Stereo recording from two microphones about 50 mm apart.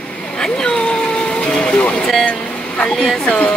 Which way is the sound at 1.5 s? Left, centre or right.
Centre.